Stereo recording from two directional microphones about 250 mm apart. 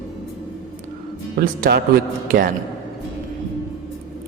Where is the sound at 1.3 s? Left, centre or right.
Right.